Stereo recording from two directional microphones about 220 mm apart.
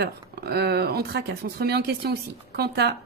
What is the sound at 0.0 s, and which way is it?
Speech, 45° right (ahead or behind).